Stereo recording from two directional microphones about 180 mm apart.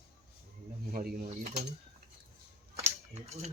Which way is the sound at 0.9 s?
50° right (ahead or behind).